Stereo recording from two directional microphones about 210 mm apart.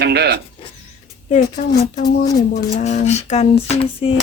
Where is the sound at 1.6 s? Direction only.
45° left (ahead or behind).